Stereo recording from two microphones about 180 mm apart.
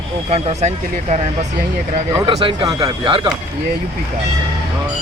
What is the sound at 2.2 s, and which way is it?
Speech, 25° right (ahead or behind).